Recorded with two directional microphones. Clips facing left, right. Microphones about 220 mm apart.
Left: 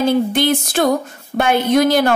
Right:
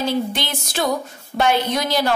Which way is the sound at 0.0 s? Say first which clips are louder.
Left 7 dB; 55° left (ahead or behind).